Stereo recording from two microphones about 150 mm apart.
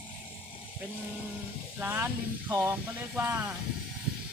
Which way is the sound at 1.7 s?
10° right (ahead or behind).